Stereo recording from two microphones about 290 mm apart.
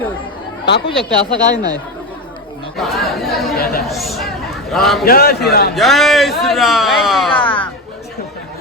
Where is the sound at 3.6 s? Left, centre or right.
Left.